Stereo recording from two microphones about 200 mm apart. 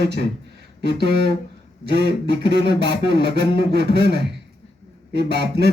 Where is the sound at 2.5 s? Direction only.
60° right (ahead or behind).